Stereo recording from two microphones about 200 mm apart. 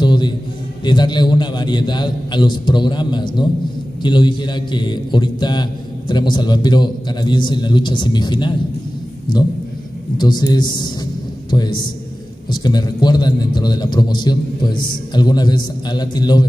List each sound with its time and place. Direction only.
0.0 s a sound: 20° left (ahead or behind)
0.8 s a man's voice: 20° left (ahead or behind)
10.1 s a man's voice: 20° left (ahead or behind)